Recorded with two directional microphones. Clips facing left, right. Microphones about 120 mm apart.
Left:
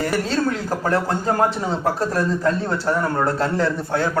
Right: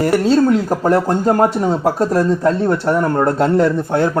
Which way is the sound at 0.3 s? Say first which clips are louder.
Right 9 dB; 20° right (ahead or behind).